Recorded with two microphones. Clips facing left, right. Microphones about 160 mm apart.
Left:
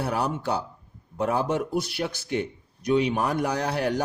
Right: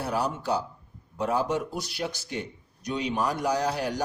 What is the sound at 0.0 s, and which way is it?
A man's voice, 60° left (ahead or behind).